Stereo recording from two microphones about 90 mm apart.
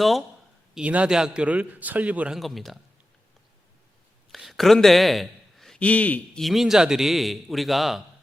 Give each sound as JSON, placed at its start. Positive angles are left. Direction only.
{"t": 0.0, "sound": "a man's voice", "side_deg": 0}
{"t": 0.7, "sound": "a man's voice", "side_deg": -15}
{"t": 2.3, "sound": "a man's voice", "side_deg": 0}
{"t": 4.3, "sound": "a man's voice", "side_deg": 0}
{"t": 5.8, "sound": "a man's voice", "side_deg": 15}
{"t": 6.4, "sound": "a man's voice", "side_deg": 0}